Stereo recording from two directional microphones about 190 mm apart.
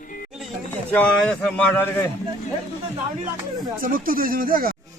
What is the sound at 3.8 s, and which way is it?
Speech, 50° right (ahead or behind).